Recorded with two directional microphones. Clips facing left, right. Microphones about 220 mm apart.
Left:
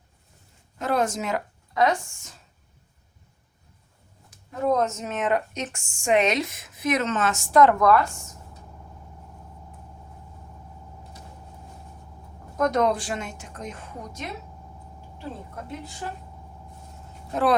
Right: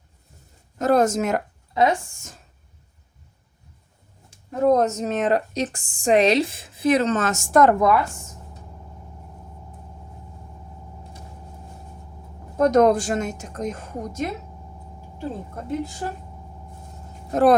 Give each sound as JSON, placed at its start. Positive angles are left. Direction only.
{"t": 0.8, "sound": "a woman's voice", "side_deg": -40}
{"t": 1.7, "sound": "speech", "side_deg": -25}
{"t": 4.6, "sound": "speech", "side_deg": -40}
{"t": 7.8, "sound": "a woman's voice", "side_deg": -15}
{"t": 12.5, "sound": "speech", "side_deg": -35}
{"t": 12.8, "sound": "a woman's voice", "side_deg": -45}
{"t": 16.0, "sound": "speech", "side_deg": -40}
{"t": 17.3, "sound": "a woman's voice", "side_deg": -45}